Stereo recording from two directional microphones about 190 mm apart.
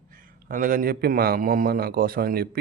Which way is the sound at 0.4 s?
45° right (ahead or behind).